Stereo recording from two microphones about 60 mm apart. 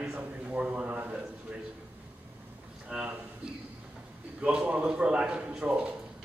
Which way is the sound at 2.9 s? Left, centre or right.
Centre.